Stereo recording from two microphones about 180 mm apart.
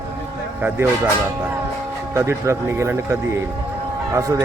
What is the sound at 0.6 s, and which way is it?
Speech, 10° right (ahead or behind).